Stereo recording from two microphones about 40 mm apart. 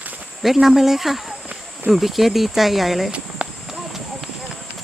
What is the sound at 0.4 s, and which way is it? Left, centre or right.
Speech, centre.